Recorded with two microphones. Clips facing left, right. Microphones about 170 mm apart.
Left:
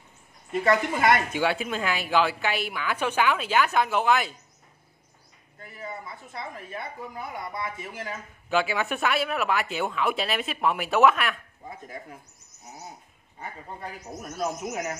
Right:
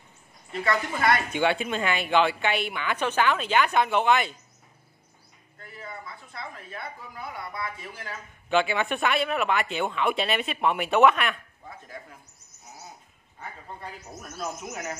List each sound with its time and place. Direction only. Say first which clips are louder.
0.5 s a woman's voice: left 4 dB; 15° left (ahead or behind)
1.3 s a woman's voice: right 1 dB; 5° left (ahead or behind)
5.6 s a sound: left 3 dB; 15° left (ahead or behind)
7.5 s speech: left 2 dB; 20° left (ahead or behind)
8.5 s a woman's voice: right 1 dB; 5° left (ahead or behind)